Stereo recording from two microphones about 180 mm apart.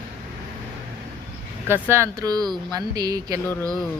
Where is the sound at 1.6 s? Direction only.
10° right (ahead or behind).